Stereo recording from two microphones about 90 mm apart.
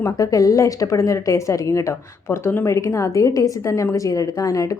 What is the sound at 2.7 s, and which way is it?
A woman's voice, 40° left (ahead or behind).